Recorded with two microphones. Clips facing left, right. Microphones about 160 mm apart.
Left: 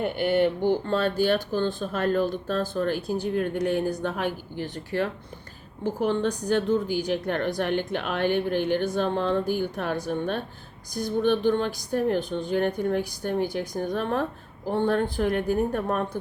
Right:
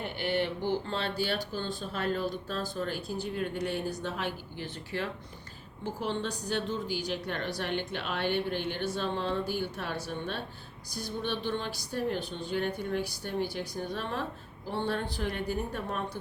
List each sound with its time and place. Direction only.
0.0 s speech: 50° left (ahead or behind)